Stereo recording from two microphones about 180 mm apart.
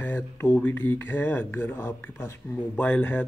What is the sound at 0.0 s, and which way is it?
Speech, 10° left (ahead or behind).